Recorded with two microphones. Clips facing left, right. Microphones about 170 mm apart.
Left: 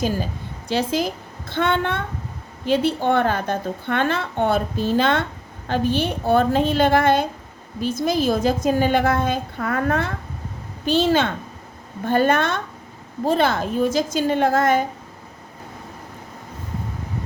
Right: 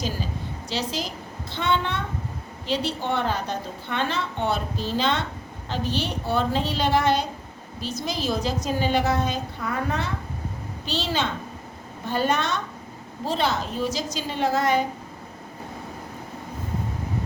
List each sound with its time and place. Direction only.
0.7 s a woman's voice: 50° left (ahead or behind)